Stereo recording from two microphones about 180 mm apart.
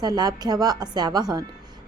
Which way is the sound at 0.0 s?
20° right (ahead or behind).